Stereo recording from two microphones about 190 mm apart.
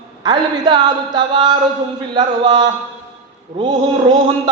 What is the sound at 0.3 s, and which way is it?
A man's voice, 25° right (ahead or behind).